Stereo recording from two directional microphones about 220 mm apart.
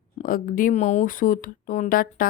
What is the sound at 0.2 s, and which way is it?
A woman's voice, 40° left (ahead or behind).